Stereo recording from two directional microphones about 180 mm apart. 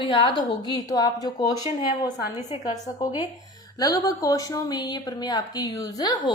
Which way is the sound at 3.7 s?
20° left (ahead or behind).